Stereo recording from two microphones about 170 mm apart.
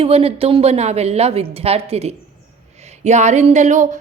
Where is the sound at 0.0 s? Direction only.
35° right (ahead or behind).